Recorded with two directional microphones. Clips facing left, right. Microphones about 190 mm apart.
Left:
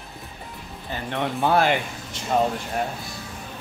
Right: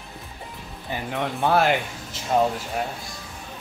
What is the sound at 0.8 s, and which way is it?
Speech, 15° right (ahead or behind).